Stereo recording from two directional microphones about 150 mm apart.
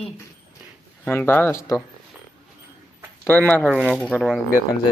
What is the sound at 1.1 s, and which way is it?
Speech, 15° left (ahead or behind).